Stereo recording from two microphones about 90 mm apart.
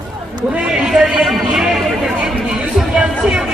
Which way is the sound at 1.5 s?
5° right (ahead or behind).